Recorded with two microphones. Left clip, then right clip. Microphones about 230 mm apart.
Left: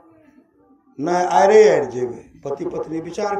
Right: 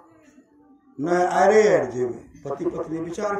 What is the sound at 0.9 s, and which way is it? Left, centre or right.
A man's voice, centre.